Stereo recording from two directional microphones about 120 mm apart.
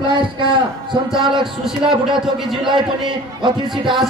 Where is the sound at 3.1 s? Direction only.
40° right (ahead or behind).